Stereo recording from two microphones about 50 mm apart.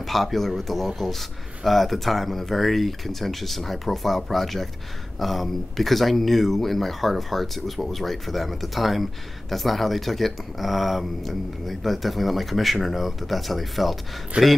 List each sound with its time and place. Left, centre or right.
0.0 s speech: centre
14.3 s a man's voice: right